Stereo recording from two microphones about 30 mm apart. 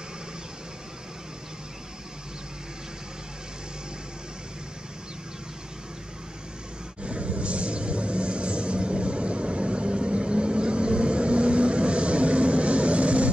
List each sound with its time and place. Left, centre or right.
7.0 s vehicle: right